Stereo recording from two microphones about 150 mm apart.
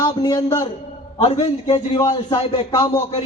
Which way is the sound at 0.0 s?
30° left (ahead or behind).